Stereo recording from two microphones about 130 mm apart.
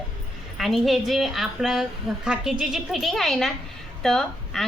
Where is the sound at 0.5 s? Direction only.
Centre (ahead or behind).